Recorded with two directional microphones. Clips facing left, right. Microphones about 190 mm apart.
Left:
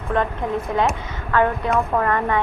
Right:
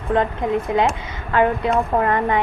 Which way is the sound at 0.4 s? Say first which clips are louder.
Right 2 dB; 15° right (ahead or behind).